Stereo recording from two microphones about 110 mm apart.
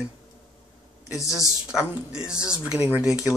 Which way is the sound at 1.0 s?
30° left (ahead or behind).